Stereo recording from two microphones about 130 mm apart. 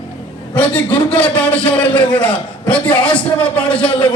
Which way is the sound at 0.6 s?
10° left (ahead or behind).